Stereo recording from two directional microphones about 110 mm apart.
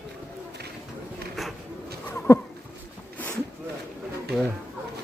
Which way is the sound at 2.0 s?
20° left (ahead or behind).